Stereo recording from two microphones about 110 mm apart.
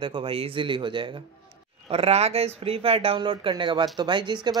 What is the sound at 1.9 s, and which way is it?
Speech, 70° right (ahead or behind).